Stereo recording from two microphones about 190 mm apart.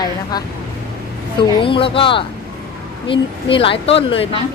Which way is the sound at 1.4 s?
25° left (ahead or behind).